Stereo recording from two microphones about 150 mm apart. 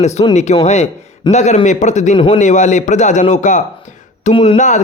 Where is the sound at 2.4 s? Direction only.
55° left (ahead or behind).